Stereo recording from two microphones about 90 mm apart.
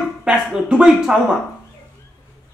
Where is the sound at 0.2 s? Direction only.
10° right (ahead or behind).